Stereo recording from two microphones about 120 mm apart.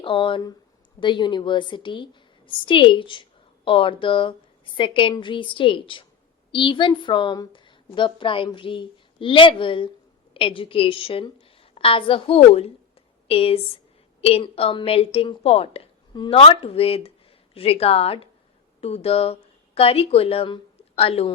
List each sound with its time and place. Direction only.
0.0 s a woman's voice: 45° left (ahead or behind)